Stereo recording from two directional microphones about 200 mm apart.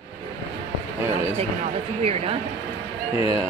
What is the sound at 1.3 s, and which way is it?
Speech, 30° right (ahead or behind).